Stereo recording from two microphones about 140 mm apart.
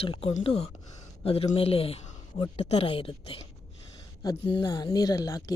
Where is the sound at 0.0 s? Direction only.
45° left (ahead or behind).